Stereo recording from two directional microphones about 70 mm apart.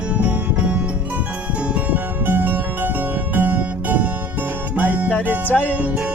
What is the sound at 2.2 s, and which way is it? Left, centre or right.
Music, right.